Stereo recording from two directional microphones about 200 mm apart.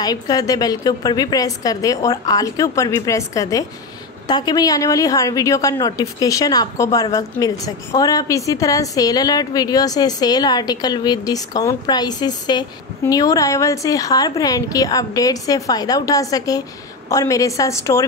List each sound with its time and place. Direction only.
0.0 s a woman's voice: 20° left (ahead or behind)